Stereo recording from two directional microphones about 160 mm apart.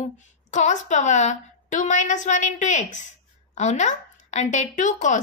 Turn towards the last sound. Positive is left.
turn(degrees=50)  # may be behind; listen again after turning